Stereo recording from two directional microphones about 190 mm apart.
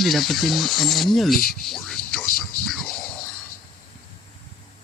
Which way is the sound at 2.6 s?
5° left (ahead or behind).